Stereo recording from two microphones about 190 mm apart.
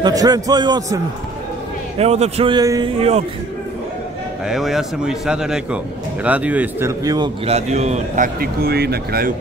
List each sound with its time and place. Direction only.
0.0 s a man's voice: 20° right (ahead or behind)
2.0 s a man's voice: 35° right (ahead or behind)
3.0 s a man's voice: 35° right (ahead or behind)
4.5 s speech: centre (ahead or behind); by 7.2 s 15° right (ahead or behind)
7.4 s a man's voice: 35° right (ahead or behind)
8.4 s speech: 55° right (ahead or behind)